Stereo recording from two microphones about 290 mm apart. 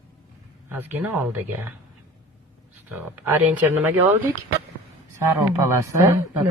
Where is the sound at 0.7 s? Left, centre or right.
Centre.